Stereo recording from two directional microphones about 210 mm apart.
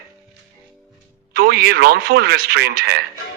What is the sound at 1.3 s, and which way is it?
A man's voice, 50° right (ahead or behind).